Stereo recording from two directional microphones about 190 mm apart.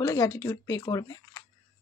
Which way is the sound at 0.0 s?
15° left (ahead or behind).